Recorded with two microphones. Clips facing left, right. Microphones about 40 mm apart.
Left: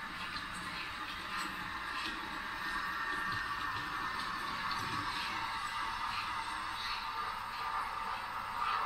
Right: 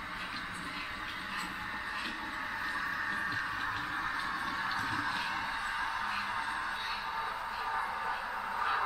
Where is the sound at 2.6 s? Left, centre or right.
Centre.